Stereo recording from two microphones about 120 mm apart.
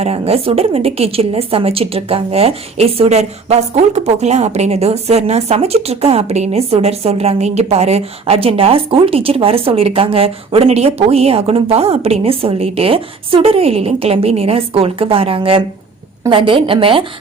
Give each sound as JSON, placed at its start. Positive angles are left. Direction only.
{"t": 0.0, "sound": "a woman's voice", "side_deg": -55}